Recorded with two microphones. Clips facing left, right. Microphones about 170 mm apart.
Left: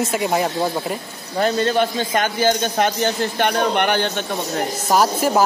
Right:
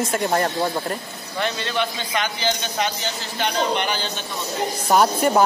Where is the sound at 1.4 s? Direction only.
40° left (ahead or behind); by 4.2 s 60° left (ahead or behind).